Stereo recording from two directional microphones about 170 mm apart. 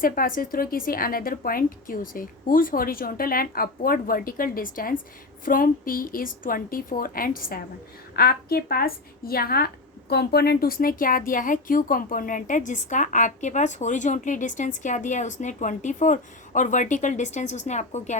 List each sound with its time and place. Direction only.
0.0 s a woman's voice: 55° left (ahead or behind)